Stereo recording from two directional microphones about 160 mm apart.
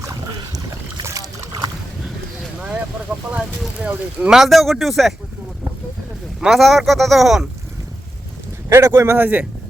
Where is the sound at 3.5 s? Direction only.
5° right (ahead or behind).